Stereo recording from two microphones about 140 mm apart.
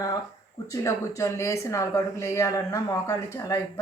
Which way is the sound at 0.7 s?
25° left (ahead or behind).